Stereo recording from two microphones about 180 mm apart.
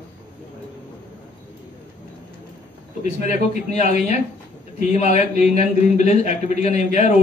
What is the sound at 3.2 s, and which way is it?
Speech, 40° left (ahead or behind).